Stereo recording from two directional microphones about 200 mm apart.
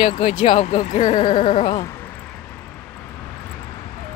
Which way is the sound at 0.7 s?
35° left (ahead or behind).